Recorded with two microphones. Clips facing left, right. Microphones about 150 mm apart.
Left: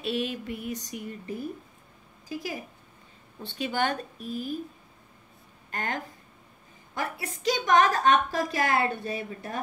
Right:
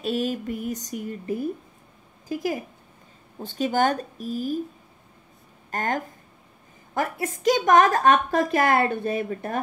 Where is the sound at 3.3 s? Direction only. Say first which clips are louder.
Right 6 dB; 40° right (ahead or behind).